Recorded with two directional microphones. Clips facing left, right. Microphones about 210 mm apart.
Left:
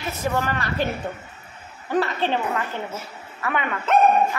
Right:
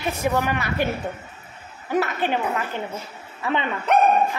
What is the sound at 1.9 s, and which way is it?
A woman's voice, 10° right (ahead or behind).